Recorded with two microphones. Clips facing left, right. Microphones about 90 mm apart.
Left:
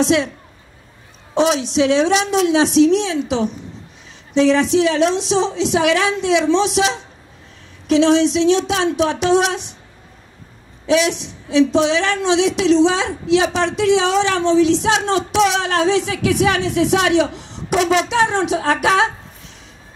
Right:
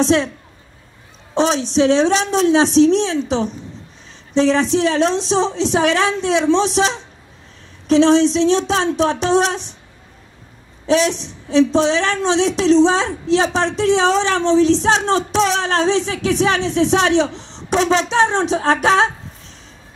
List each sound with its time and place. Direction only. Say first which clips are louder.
0.0 s a woman's voice: right 1 dB; 35° right (ahead or behind)
1.3 s a woman's voice: even; 35° right (ahead or behind)
10.9 s a woman's voice: even; 35° right (ahead or behind)